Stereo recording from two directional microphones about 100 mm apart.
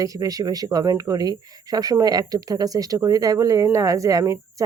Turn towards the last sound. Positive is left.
turn(degrees=-35)  # may be behind; listen again after turning